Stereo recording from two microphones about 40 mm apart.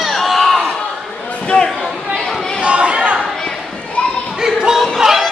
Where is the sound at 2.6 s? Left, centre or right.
Right.